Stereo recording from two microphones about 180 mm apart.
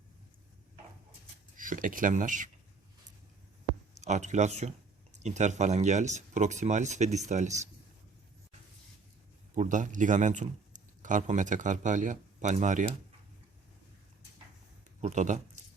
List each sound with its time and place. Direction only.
1.5 s speech: 50° right (ahead or behind)
4.0 s speech: 40° right (ahead or behind)
9.6 s speech: 45° right (ahead or behind)
15.0 s speech: 40° right (ahead or behind)